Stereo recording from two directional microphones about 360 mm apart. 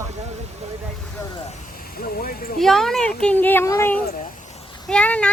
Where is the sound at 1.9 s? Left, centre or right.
Left.